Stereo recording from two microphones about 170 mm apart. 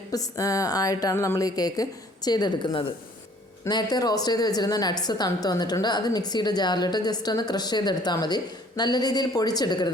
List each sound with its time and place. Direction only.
0.1 s a woman's voice: 20° left (ahead or behind)